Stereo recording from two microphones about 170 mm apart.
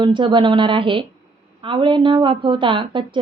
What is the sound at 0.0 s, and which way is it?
A woman's voice, 30° right (ahead or behind).